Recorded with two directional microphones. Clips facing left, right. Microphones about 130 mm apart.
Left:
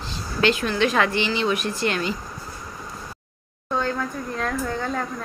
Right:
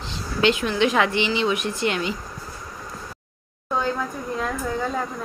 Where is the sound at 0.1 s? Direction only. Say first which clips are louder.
Right 1 dB; 20° right (ahead or behind).